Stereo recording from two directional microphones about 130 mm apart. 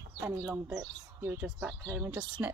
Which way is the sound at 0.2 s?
20° right (ahead or behind).